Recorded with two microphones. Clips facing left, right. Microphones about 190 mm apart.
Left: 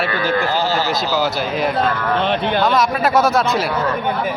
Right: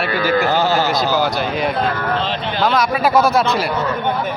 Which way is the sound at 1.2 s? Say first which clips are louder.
Even; centre (ahead or behind).